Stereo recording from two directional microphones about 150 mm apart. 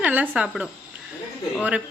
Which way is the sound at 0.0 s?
10° right (ahead or behind).